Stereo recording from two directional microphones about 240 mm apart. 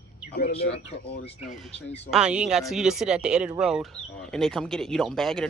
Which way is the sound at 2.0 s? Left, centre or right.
Centre.